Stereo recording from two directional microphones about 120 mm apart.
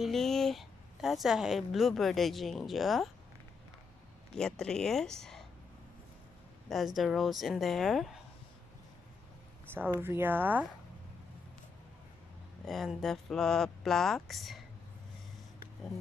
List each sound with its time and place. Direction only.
0.0 s speech: 5° left (ahead or behind)
4.4 s speech: 5° left (ahead or behind)
7.0 s speech: centre (ahead or behind)
9.8 s speech: 20° right (ahead or behind)
12.6 s speech: centre (ahead or behind)